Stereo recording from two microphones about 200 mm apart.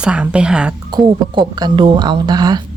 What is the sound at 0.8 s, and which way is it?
Speech, 20° right (ahead or behind).